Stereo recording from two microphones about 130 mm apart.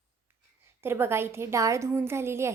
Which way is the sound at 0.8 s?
20° right (ahead or behind).